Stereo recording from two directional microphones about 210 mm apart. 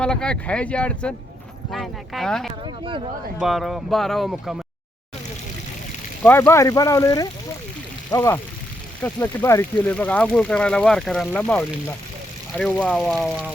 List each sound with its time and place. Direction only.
0.0 s speech: 5° left (ahead or behind)
2.6 s speech: 25° right (ahead or behind)
3.3 s speech: centre (ahead or behind)
6.2 s speech: 10° left (ahead or behind)